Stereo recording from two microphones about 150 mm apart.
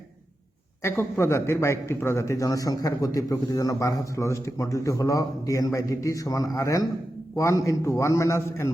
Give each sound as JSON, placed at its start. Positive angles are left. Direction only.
{"t": 0.8, "sound": "a man's voice", "side_deg": 15}